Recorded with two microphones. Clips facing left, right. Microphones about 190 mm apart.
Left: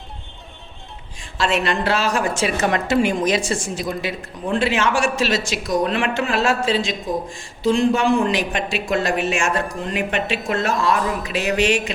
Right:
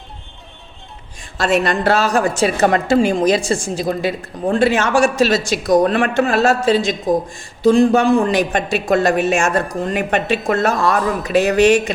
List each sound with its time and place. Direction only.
1.4 s a woman's voice: 45° right (ahead or behind)